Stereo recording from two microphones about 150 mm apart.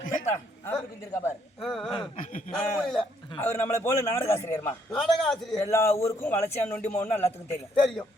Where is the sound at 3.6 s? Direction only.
15° left (ahead or behind).